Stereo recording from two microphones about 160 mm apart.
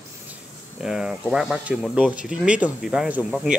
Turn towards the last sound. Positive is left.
turn(degrees=0)  # may be behind; listen again after turning